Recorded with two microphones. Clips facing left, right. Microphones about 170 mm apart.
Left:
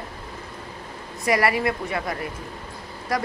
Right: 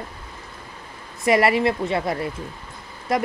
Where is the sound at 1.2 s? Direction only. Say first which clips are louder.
Right 4 dB; 25° right (ahead or behind).